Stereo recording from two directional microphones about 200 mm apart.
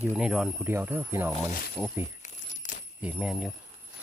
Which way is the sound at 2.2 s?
40° left (ahead or behind).